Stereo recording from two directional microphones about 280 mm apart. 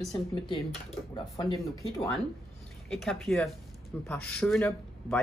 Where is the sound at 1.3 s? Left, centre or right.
Centre.